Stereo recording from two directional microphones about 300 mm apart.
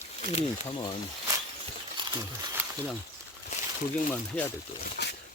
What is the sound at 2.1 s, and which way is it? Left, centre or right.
Speech, centre.